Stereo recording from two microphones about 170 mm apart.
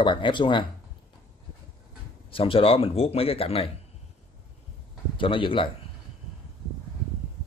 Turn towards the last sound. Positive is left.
turn(degrees=30)  # may be behind; listen again after turning